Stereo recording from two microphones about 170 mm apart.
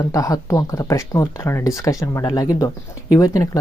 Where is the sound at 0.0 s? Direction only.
20° left (ahead or behind).